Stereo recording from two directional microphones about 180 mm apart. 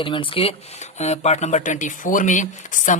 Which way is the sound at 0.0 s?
30° left (ahead or behind).